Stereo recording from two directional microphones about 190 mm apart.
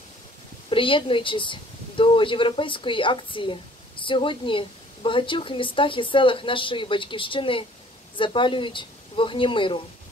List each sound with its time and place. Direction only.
0.7 s speech: 25° left (ahead or behind)